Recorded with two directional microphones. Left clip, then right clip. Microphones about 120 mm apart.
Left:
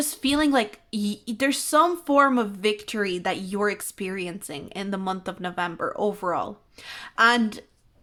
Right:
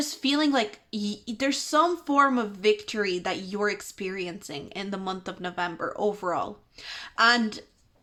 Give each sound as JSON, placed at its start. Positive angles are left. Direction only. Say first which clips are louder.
{"t": 0.0, "sound": "speech", "louder": "left 2 dB", "side_deg": 40}